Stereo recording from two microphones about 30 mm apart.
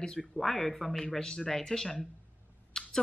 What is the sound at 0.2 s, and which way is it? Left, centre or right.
Speech, centre.